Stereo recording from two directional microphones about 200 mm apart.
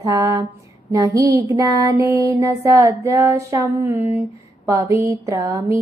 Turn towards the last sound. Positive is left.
turn(degrees=-15)  # may be behind; listen again after turning